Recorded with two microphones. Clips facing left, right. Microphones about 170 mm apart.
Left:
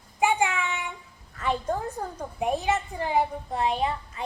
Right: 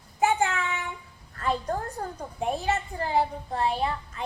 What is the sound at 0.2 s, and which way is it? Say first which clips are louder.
Child singing: even; 15° left (ahead or behind).